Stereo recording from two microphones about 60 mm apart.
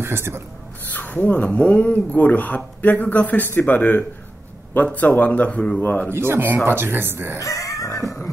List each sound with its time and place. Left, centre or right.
0.0 s speech: right
0.8 s speech: left
5.8 s speech: left
6.1 s speech: right
7.3 s a sound: left